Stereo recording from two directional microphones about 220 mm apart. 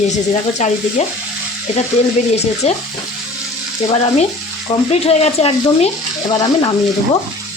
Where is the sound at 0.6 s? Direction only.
30° left (ahead or behind).